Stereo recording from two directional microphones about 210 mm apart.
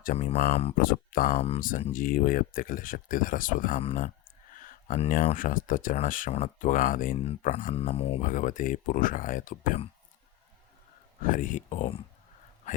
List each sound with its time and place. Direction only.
0.0 s speech: 45° left (ahead or behind)
0.3 s speech: 30° left (ahead or behind)
0.8 s speech: 40° left (ahead or behind)
7.3 s speech: 30° left (ahead or behind)
11.2 s speech: 40° left (ahead or behind)